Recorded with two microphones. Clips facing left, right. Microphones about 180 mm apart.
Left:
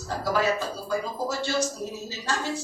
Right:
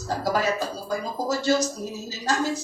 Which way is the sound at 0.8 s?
40° right (ahead or behind).